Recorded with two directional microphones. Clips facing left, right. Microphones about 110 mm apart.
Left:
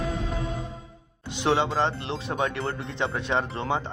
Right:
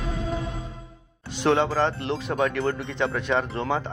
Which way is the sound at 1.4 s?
20° left (ahead or behind).